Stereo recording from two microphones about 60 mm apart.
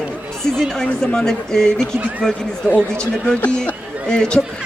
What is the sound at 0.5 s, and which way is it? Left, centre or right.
Speech, centre.